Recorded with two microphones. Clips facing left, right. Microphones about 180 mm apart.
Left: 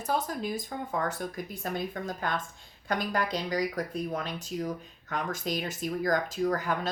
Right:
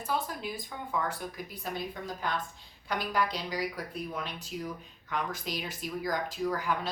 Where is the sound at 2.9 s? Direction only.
50° left (ahead or behind).